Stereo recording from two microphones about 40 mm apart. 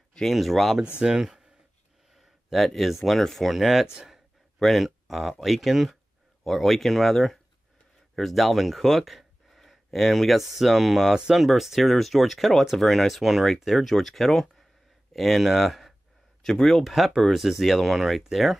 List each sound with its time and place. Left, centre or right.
0.3 s speech: centre
0.9 s speech: centre
2.1 s speech: centre
3.8 s speech: centre
4.6 s speech: centre
16.8 s speech: centre